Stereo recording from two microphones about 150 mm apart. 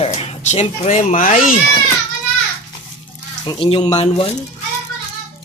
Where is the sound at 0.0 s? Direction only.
40° left (ahead or behind); by 1.5 s 60° left (ahead or behind).